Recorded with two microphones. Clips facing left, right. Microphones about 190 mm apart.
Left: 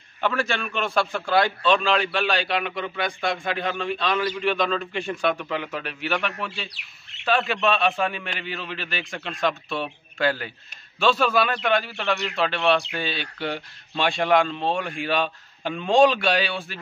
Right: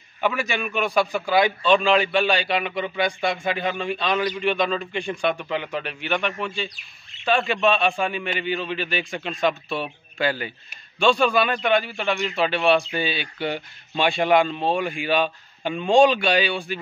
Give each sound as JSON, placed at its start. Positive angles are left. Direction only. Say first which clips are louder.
{"t": 0.2, "sound": "a man's voice", "louder": "right 1 dB", "side_deg": -10}
{"t": 1.6, "sound": "speech", "louder": "right 3 dB", "side_deg": 0}
{"t": 6.7, "sound": "bird", "louder": "left 2 dB", "side_deg": 70}
{"t": 7.2, "sound": "speech", "louder": "right 2 dB", "side_deg": 0}